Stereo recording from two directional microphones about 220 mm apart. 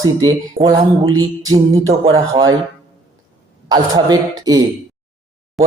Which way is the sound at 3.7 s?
15° right (ahead or behind).